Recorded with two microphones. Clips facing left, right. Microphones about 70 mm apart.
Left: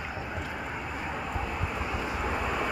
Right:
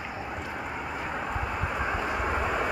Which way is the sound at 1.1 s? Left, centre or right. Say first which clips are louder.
Right 2 dB; centre.